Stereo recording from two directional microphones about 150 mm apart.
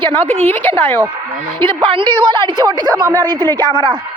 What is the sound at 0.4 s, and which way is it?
Speech, 15° left (ahead or behind).